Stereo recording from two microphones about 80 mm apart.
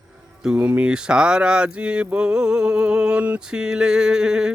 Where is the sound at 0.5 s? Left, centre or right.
Centre.